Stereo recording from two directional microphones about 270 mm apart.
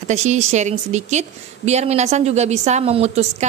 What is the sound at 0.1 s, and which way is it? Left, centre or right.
A woman's voice, right.